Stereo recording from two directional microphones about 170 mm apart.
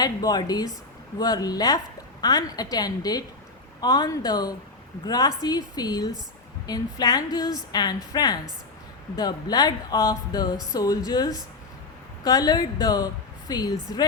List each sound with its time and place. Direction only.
0.0 s a woman's voice: 20° left (ahead or behind)